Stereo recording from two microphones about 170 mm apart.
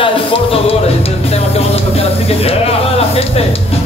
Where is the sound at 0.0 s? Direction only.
35° left (ahead or behind).